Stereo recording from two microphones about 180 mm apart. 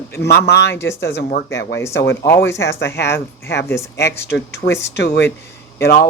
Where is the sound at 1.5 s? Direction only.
75° left (ahead or behind).